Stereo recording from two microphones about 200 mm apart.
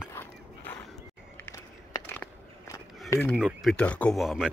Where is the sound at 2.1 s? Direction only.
15° left (ahead or behind).